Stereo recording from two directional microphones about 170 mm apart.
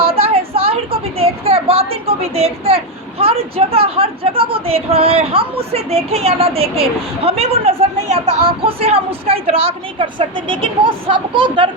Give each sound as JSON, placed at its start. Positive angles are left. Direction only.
{"t": 0.0, "sound": "a woman's voice", "side_deg": -35}